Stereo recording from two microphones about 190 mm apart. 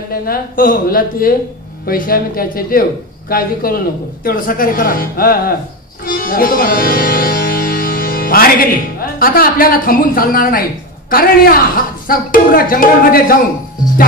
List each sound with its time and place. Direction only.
0.1 s speech: 50° left (ahead or behind)
6.0 s music: 50° left (ahead or behind)
9.2 s speech: 50° left (ahead or behind)